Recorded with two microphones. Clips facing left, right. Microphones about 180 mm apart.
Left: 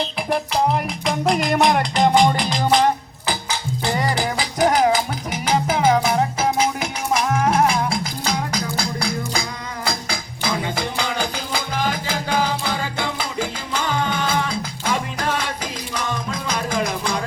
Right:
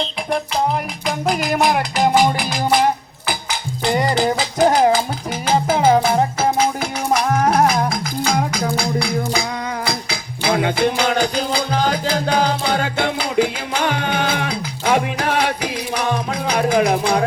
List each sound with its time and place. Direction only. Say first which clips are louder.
0.0 s music: right 1 dB; centre (ahead or behind); by 8.0 s 40° right (ahead or behind)
8.3 s music: right 5 dB; 55° right (ahead or behind)